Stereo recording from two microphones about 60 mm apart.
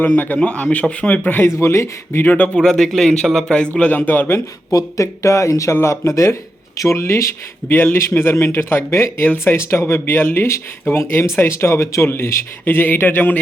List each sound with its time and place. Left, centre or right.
0.0 s a man's voice: left
1.5 s speech: left
2.2 s a man's voice: left
2.6 s speech: centre
3.8 s speech: left
4.7 s speech: left
7.7 s speech: left
12.6 s speech: left